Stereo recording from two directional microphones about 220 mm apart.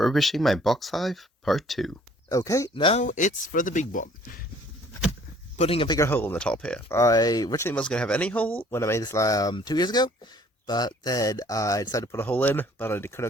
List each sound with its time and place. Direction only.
0.0 s speech: centre (ahead or behind)
2.3 s speech: 15° left (ahead or behind)
3.0 s speech: 35° left (ahead or behind)
5.5 s speech: 25° left (ahead or behind)
6.0 s speech: 10° left (ahead or behind)
6.9 s speech: 15° left (ahead or behind)